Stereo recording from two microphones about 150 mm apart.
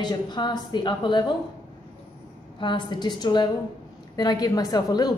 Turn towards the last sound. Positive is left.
turn(degrees=25)  # may be behind; listen again after turning